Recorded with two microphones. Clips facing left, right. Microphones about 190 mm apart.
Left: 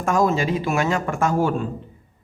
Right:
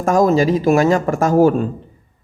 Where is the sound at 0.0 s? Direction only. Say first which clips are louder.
Right 6 dB; 40° right (ahead or behind).